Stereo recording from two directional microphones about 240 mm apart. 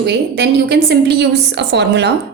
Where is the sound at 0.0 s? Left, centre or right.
Right.